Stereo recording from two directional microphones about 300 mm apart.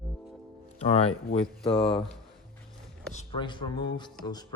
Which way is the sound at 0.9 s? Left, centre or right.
Centre.